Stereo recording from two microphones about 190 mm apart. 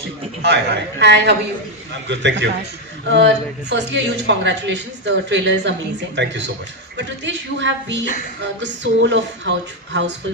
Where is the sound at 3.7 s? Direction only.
70° right (ahead or behind).